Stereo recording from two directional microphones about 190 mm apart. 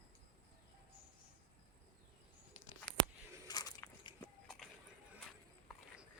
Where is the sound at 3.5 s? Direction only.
20° left (ahead or behind).